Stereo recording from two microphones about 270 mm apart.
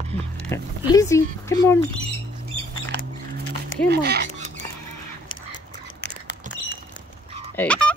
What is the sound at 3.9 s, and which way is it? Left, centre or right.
Speech, right.